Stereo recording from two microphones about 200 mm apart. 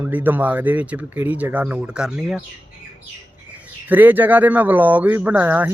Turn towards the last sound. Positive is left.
turn(degrees=-10)  # may be behind; listen again after turning